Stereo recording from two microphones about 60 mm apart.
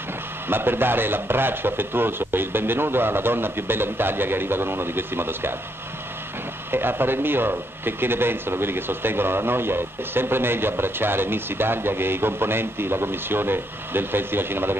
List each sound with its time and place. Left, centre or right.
0.5 s a man's voice: right
6.7 s a man's voice: right